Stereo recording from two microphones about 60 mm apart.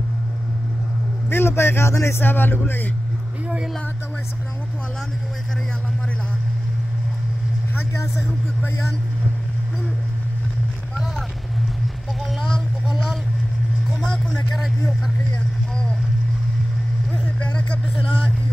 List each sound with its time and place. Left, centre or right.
1.3 s speech: left
2.2 s speech: left
3.4 s music: centre
12.3 s a sound: centre
13.8 s vehicle: centre
14.6 s speech: centre
17.4 s speech: left